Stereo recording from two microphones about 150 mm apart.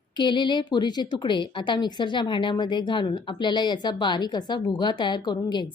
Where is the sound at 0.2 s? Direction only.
30° left (ahead or behind).